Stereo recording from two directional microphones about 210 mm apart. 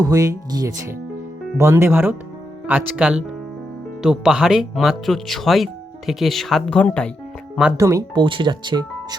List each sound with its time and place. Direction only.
0.0 s speech: 15° right (ahead or behind); by 7.1 s 5° left (ahead or behind)
7.8 s speech: 15° right (ahead or behind)